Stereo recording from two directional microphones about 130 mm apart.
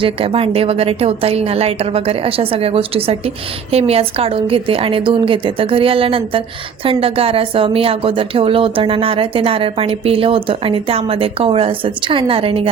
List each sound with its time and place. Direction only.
0.0 s speech: 45° right (ahead or behind)